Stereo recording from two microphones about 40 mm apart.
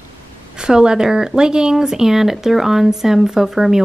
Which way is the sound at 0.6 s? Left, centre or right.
Centre.